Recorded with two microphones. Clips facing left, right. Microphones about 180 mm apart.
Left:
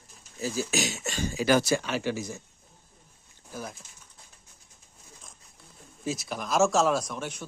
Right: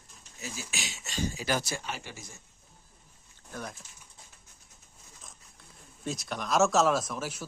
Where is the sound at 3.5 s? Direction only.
5° left (ahead or behind).